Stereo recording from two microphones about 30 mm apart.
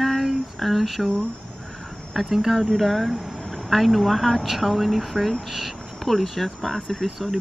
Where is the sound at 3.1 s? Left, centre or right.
Centre.